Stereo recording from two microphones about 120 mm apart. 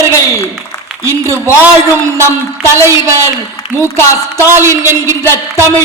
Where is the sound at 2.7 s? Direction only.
20° right (ahead or behind).